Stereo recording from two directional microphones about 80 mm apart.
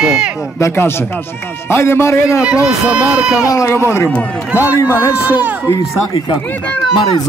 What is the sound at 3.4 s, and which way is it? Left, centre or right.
Speech, left.